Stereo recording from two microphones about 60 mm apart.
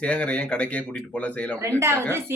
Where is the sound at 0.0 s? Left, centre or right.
Centre.